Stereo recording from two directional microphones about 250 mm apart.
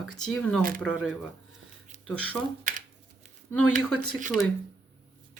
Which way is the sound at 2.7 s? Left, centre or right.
Right.